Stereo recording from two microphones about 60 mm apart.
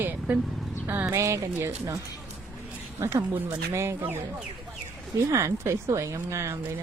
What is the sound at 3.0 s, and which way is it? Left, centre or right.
Speech, right.